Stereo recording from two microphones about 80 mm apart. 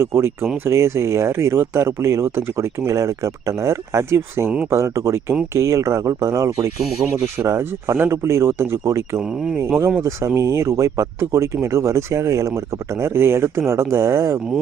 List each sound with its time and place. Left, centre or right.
0.0 s speech: right